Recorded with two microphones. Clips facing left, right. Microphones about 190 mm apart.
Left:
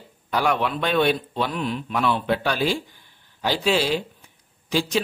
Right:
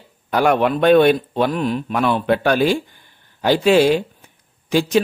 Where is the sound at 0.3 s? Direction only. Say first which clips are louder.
Right 7 dB; 50° right (ahead or behind).